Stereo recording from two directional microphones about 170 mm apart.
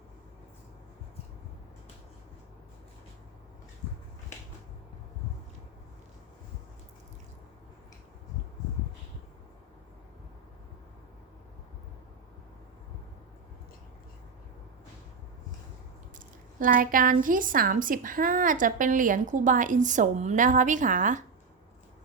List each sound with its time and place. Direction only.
16.6 s a woman's voice: 55° right (ahead or behind)